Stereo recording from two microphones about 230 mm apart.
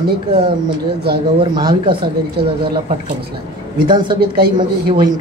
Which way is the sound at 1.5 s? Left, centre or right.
Centre.